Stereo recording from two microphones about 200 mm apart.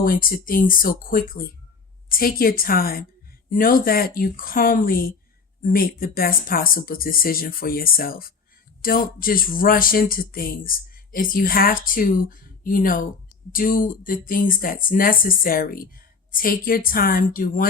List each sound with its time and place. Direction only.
0.0 s speech: 45° left (ahead or behind)